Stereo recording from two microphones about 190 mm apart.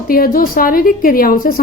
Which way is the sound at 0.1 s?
50° left (ahead or behind).